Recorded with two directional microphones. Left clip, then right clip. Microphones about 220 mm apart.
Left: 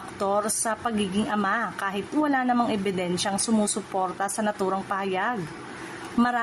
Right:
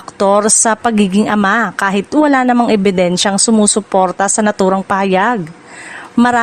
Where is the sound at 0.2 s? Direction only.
45° right (ahead or behind).